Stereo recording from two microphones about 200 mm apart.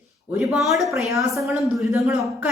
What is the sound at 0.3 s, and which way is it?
Speech, centre (ahead or behind).